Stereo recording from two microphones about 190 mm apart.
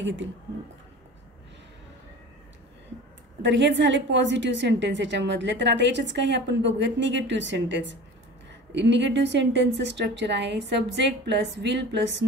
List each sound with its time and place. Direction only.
0.0 s a woman's voice: 75° right (ahead or behind)
3.4 s a woman's voice: 70° right (ahead or behind)